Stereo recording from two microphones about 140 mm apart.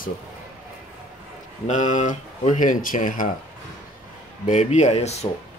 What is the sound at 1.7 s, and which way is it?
Speech, 60° left (ahead or behind).